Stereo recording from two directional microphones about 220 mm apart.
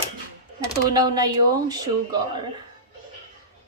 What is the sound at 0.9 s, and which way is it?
Speech, 15° right (ahead or behind).